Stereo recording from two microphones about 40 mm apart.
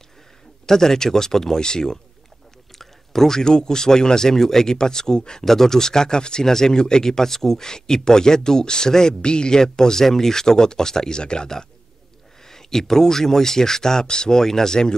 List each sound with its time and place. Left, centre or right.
0.7 s speech: centre
2.8 s speech: centre